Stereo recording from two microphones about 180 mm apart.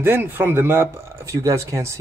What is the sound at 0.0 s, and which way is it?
Speech, 10° right (ahead or behind).